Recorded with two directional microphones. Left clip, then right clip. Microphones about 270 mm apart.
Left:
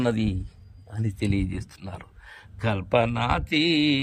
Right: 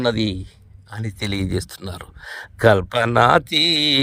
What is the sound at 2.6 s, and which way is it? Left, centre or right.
Speech, centre.